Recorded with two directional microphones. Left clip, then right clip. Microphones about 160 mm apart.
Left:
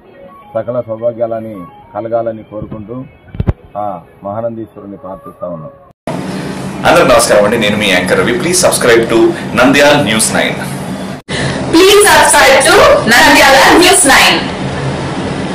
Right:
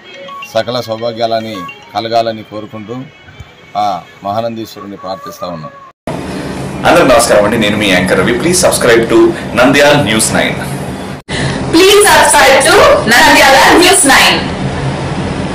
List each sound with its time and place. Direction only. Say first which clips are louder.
0.5 s speech: right 2 dB; 20° right (ahead or behind)
3.7 s speech: right 7 dB; 20° right (ahead or behind)
6.0 s a sound: even; centre (ahead or behind)